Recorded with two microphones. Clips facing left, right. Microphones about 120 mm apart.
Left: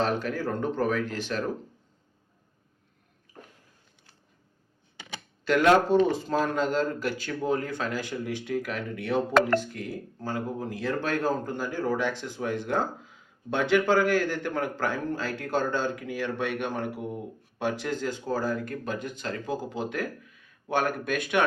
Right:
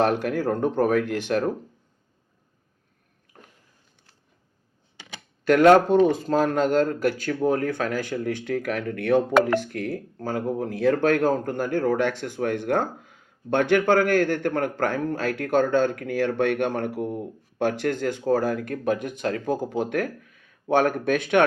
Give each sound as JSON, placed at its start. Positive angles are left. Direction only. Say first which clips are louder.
{"t": 0.0, "sound": "speech", "louder": "right 5 dB", "side_deg": -60}
{"t": 5.5, "sound": "speech", "louder": "right 5 dB", "side_deg": -55}
{"t": 20.7, "sound": "speech", "louder": "right 6 dB", "side_deg": 5}